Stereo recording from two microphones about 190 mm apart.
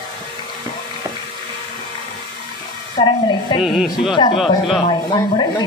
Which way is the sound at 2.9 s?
25° left (ahead or behind).